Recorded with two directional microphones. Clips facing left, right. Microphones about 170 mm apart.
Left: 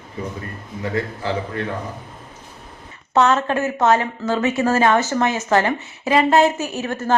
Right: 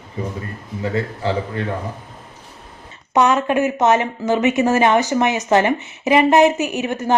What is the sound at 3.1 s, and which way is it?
Speech, 15° right (ahead or behind).